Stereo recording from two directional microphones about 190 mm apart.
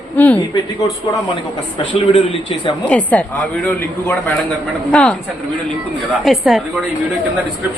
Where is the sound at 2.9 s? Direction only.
5° left (ahead or behind).